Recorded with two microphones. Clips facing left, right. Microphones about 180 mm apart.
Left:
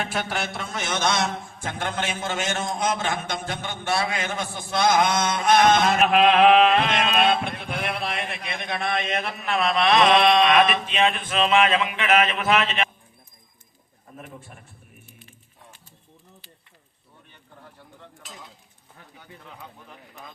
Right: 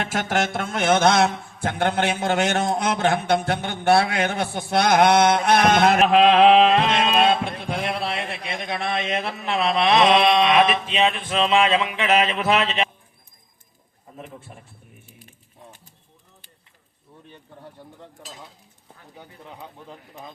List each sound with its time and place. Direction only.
0.1 s music: 45° right (ahead or behind)
0.4 s a man's voice: 50° right (ahead or behind)
6.1 s a sound: 30° right (ahead or behind)